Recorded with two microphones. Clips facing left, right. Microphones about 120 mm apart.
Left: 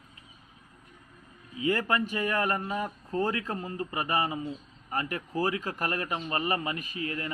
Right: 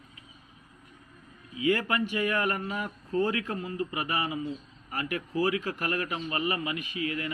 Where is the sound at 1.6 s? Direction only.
35° left (ahead or behind).